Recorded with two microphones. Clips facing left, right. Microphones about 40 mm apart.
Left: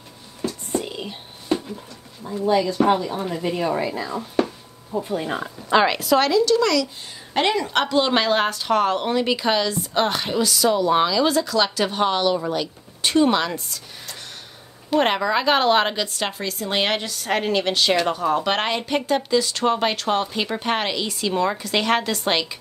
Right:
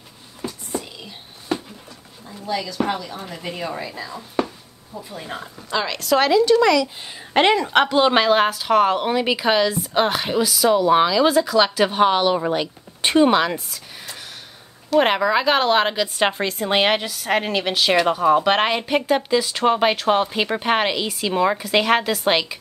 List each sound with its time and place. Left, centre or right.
0.7 s whispering: left
2.3 s speech: left
6.1 s a woman's voice: centre
6.4 s a woman's voice: right
15.0 s a woman's voice: centre
16.2 s a woman's voice: right
16.7 s a woman's voice: centre